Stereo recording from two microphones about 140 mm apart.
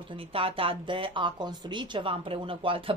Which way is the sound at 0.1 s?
40° right (ahead or behind).